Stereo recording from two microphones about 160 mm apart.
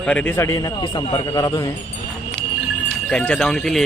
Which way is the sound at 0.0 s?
10° left (ahead or behind).